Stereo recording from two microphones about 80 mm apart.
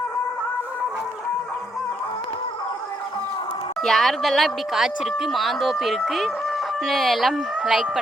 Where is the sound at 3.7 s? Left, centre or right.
Centre.